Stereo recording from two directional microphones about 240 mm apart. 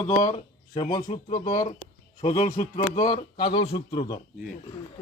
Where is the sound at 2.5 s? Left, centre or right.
Left.